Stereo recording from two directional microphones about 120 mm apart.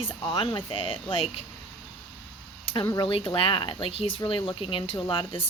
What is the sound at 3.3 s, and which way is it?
A woman's voice, 45° left (ahead or behind).